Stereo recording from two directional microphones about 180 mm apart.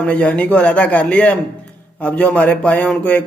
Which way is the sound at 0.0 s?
5° left (ahead or behind).